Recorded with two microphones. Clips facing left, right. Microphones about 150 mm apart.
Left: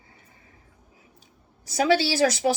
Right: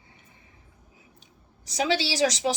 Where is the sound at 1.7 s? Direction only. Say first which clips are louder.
Left 5 dB; 50° left (ahead or behind).